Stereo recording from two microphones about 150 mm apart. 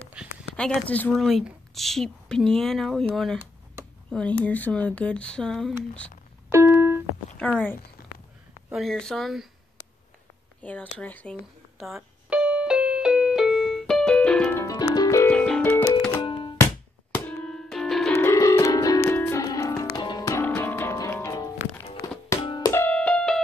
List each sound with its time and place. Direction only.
0.2 s a sound: 5° right (ahead or behind)
0.6 s speech: 10° left (ahead or behind)
1.2 s speech: centre (ahead or behind)
4.1 s speech: 10° left (ahead or behind)
6.5 s music: 15° right (ahead or behind)
7.3 s speech: 10° left (ahead or behind)
10.6 s speech: 10° left (ahead or behind)
11.8 s music: 5° right (ahead or behind)
14.6 s music: 25° left (ahead or behind)
15.3 s music: 5° left (ahead or behind)
16.3 s music: 35° left (ahead or behind)
17.1 s music: 5° left (ahead or behind)
18.1 s music: 20° left (ahead or behind)
22.7 s music: 10° left (ahead or behind)